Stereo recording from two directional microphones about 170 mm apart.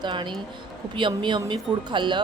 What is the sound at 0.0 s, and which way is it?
A woman's voice, 25° right (ahead or behind).